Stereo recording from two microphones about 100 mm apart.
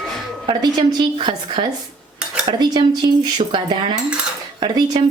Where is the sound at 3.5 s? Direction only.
50° right (ahead or behind).